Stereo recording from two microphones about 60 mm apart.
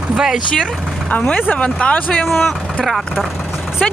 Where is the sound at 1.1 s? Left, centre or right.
Left.